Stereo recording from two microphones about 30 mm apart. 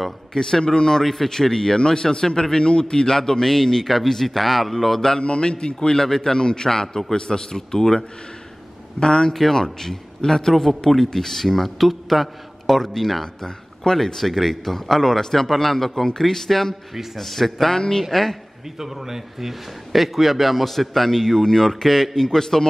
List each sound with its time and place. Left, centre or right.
0.3 s a man's voice: left
5.2 s a man's voice: left; by 8.0 s centre
9.0 s a man's voice: left
9.3 s a man's voice: centre
10.5 s a man's voice: centre
16.9 s a man's voice: centre
17.2 s a man's voice: centre
17.7 s a man's voice: left
18.1 s a man's voice: centre
18.8 s a man's voice: centre